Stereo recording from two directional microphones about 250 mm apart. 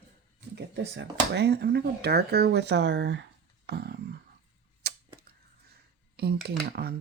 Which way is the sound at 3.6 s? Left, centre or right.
Right.